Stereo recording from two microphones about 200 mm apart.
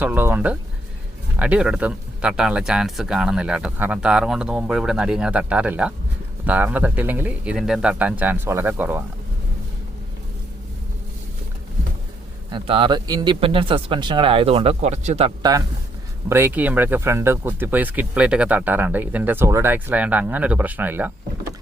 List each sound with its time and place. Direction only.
0.0 s speech: 10° right (ahead or behind)
12.5 s speech: 25° right (ahead or behind)
16.3 s speech: 10° right (ahead or behind)